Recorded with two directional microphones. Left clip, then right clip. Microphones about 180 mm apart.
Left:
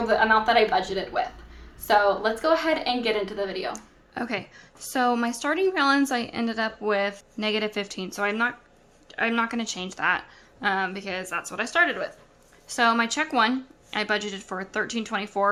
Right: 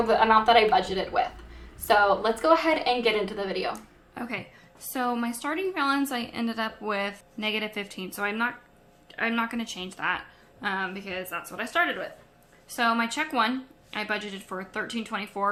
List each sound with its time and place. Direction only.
0.0 s a woman's voice: centre (ahead or behind)
4.1 s a woman's voice: 35° left (ahead or behind)